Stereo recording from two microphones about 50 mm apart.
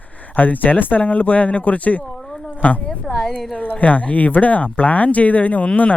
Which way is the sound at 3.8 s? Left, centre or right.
Left.